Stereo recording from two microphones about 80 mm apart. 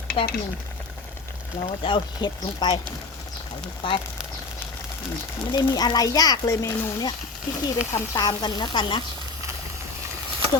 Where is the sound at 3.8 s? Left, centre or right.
Left.